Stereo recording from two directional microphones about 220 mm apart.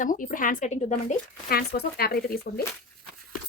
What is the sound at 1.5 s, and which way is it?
Speech, 45° left (ahead or behind).